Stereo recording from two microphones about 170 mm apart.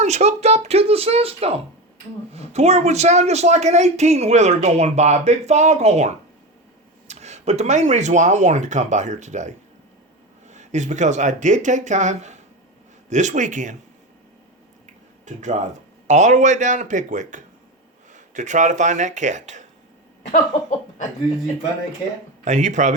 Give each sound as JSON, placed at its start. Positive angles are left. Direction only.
{"t": 0.0, "sound": "speech", "side_deg": -40}
{"t": 10.5, "sound": "speech", "side_deg": -45}
{"t": 15.2, "sound": "speech", "side_deg": -45}
{"t": 20.3, "sound": "speech", "side_deg": 45}
{"t": 22.4, "sound": "speech", "side_deg": -45}